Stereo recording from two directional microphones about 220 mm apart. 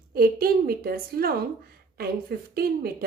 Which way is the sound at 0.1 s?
45° right (ahead or behind).